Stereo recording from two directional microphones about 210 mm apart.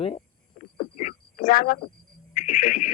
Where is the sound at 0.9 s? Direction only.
40° left (ahead or behind).